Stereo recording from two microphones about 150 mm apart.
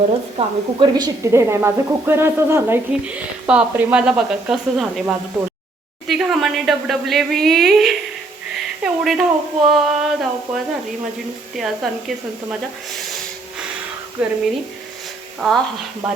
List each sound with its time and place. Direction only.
0.3 s a woman's voice: 30° right (ahead or behind); by 12.5 s centre (ahead or behind)
14.2 s a woman's voice: 5° right (ahead or behind)
15.4 s speech: centre (ahead or behind)